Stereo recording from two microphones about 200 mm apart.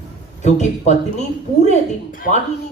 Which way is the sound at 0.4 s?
35° left (ahead or behind).